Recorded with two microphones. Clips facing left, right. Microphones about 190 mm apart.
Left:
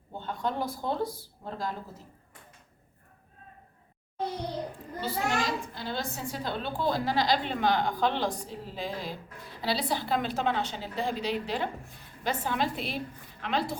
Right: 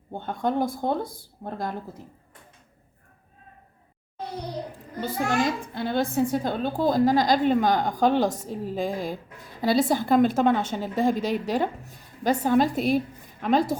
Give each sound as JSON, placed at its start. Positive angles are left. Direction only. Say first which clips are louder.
{"t": 0.1, "sound": "a woman's voice", "louder": "right 6 dB", "side_deg": -55}
{"t": 4.9, "sound": "a woman's voice", "louder": "right 5 dB", "side_deg": -55}